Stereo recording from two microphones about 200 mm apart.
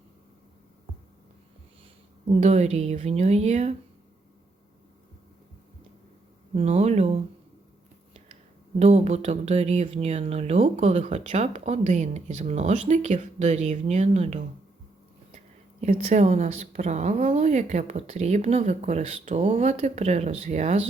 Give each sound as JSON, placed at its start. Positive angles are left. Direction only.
{"t": 2.2, "sound": "speech", "side_deg": -35}
{"t": 6.5, "sound": "speech", "side_deg": -30}
{"t": 8.8, "sound": "speech", "side_deg": -30}
{"t": 15.8, "sound": "speech", "side_deg": -35}